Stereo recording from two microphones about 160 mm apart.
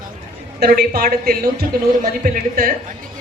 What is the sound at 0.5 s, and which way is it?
Speech, 70° right (ahead or behind).